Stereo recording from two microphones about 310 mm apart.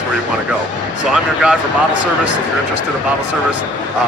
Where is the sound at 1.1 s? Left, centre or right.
Centre.